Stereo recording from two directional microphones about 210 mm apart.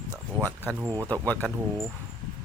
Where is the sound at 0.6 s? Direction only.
15° right (ahead or behind).